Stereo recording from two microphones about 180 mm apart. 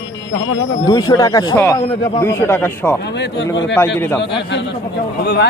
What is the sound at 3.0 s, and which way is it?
Speech, 70° left (ahead or behind).